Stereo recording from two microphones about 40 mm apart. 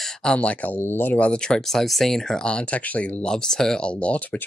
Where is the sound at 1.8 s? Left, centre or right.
Centre.